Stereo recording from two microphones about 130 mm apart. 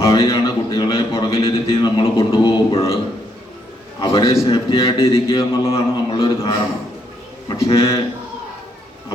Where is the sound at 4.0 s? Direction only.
40° left (ahead or behind).